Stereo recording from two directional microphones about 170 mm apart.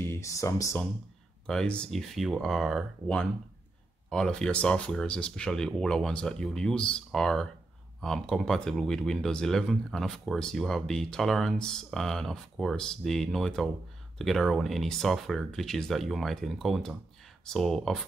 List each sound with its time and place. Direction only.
0.0 s speech: 15° left (ahead or behind)
1.5 s speech: 5° left (ahead or behind)